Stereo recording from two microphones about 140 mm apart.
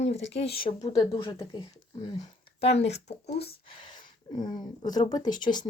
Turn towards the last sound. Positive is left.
turn(degrees=30)  # may be behind; listen again after turning